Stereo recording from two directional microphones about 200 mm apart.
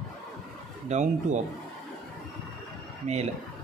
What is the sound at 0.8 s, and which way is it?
Speech, 35° right (ahead or behind).